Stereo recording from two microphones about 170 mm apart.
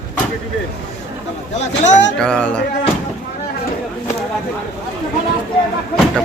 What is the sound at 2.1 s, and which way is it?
Speech, 5° left (ahead or behind).